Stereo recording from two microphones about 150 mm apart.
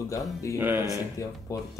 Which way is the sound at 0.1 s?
20° left (ahead or behind).